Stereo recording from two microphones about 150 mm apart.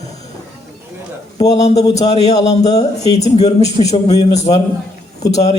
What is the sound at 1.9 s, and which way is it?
Speech, 45° left (ahead or behind).